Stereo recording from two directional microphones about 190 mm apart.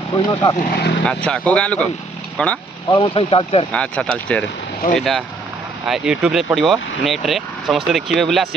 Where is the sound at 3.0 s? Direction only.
30° left (ahead or behind).